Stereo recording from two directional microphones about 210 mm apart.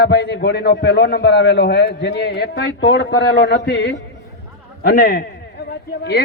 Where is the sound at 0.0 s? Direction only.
50° left (ahead or behind).